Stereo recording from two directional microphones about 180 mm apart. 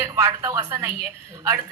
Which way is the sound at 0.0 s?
15° right (ahead or behind).